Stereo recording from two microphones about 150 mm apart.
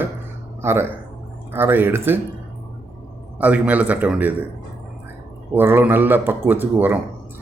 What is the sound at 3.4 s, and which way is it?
Speech, 10° right (ahead or behind).